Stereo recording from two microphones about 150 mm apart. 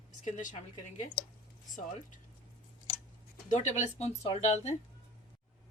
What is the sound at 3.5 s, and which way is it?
Speech, 50° left (ahead or behind).